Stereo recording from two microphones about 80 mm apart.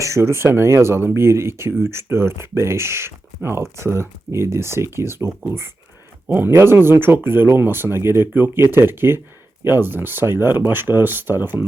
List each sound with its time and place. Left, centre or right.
0.0 s speech: right